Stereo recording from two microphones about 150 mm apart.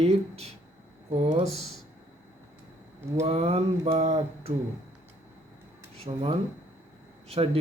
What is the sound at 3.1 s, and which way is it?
Mantra, 45° right (ahead or behind).